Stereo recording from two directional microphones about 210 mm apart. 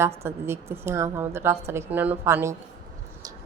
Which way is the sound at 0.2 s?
10° right (ahead or behind).